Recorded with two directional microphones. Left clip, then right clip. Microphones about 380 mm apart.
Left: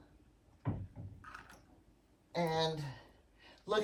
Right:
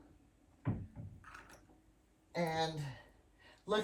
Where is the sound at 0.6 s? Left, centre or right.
Left.